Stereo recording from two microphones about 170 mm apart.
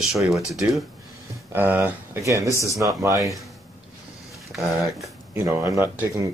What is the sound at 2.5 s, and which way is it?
Speech, 20° left (ahead or behind).